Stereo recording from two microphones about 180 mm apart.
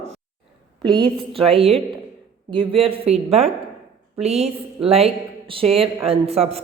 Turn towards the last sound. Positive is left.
turn(degrees=-35)  # may be behind; listen again after turning